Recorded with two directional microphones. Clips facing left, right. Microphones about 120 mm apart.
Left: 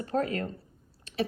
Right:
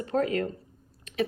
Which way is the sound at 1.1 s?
35° left (ahead or behind).